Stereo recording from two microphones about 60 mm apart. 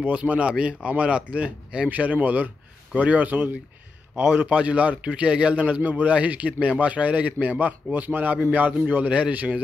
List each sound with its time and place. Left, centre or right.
0.0 s a man's voice: right